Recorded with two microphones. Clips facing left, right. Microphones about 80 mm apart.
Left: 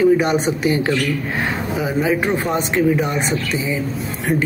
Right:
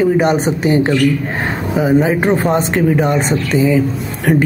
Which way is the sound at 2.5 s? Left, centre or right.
Right.